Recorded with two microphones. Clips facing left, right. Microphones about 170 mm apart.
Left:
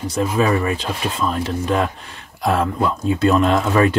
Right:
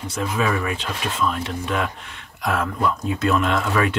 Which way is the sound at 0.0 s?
35° left (ahead or behind).